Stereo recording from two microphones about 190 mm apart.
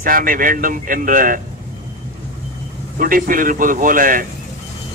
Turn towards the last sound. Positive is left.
turn(degrees=-45)  # may be behind; listen again after turning